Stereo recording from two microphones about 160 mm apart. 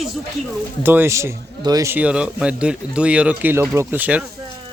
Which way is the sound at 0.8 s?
15° right (ahead or behind).